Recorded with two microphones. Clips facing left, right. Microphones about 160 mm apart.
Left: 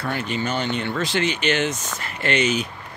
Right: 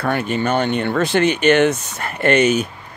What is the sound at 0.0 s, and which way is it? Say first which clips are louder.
Speech: right 6 dB; 55° right (ahead or behind).